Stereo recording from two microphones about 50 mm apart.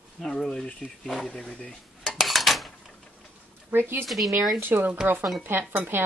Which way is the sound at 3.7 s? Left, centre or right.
Right.